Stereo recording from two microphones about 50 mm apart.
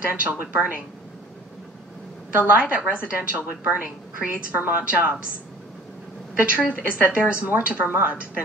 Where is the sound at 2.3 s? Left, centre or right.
Right.